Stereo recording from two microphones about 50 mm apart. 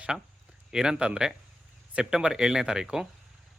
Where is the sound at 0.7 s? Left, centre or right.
Centre.